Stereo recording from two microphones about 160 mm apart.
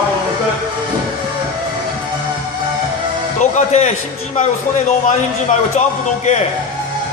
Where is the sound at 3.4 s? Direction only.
45° left (ahead or behind).